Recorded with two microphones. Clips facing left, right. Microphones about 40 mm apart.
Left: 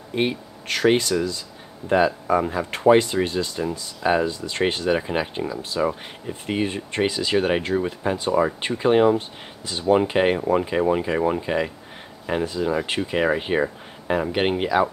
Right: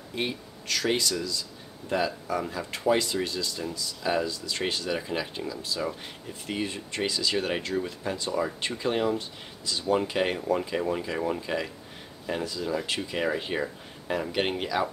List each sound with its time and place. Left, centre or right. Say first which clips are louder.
0.1 s speech: left 8 dB; left